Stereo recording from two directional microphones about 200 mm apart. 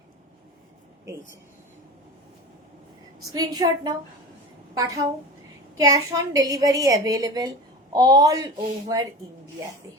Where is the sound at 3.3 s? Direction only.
20° right (ahead or behind).